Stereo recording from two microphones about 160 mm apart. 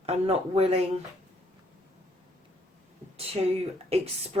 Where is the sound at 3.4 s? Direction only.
35° right (ahead or behind).